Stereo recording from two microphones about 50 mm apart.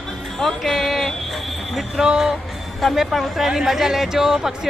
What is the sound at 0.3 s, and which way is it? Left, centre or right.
Speech, centre.